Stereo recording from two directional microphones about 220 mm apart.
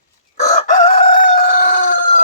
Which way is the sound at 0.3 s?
30° left (ahead or behind).